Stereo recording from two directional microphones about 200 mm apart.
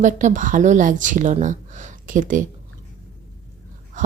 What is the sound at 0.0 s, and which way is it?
A woman's voice, 40° right (ahead or behind).